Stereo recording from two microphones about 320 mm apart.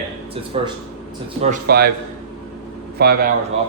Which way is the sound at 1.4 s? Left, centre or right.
Right.